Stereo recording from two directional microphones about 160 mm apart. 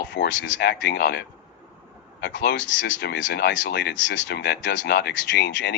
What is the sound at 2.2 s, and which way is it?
Speech, 90° left.